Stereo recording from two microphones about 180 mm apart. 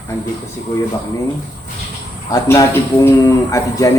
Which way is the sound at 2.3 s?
20° left (ahead or behind).